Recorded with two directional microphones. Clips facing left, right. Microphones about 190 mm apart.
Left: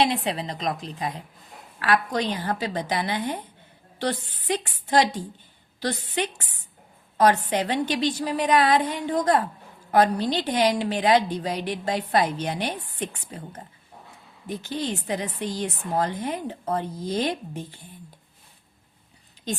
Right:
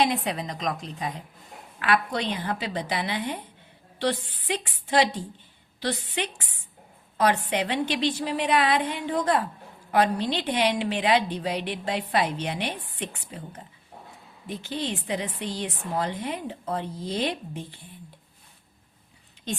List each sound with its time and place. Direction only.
0.0 s a woman's voice: 30° left (ahead or behind)
14.4 s a woman's voice: 45° left (ahead or behind)